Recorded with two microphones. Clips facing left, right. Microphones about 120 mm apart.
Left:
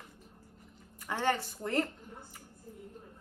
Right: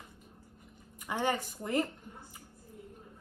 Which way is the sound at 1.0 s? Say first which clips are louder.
Left 1 dB; 15° right (ahead or behind).